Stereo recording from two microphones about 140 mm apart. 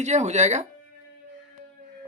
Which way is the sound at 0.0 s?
55° right (ahead or behind).